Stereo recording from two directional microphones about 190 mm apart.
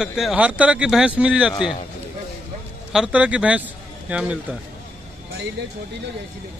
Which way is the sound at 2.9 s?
5° right (ahead or behind).